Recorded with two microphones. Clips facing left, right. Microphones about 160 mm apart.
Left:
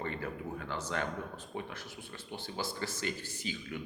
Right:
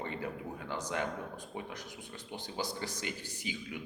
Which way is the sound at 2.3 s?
15° right (ahead or behind).